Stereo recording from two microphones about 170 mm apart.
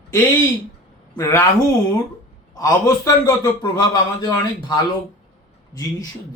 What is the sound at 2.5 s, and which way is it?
A man's voice, 20° left (ahead or behind).